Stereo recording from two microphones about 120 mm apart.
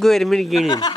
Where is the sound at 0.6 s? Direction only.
35° left (ahead or behind).